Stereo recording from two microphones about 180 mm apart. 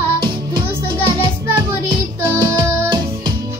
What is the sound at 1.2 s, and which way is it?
Music, 20° right (ahead or behind).